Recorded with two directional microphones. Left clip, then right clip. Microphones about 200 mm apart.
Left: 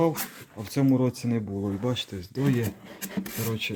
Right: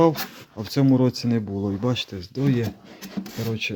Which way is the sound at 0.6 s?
15° right (ahead or behind).